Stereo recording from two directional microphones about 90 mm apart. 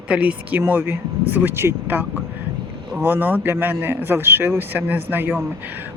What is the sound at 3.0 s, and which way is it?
Speech, 20° right (ahead or behind).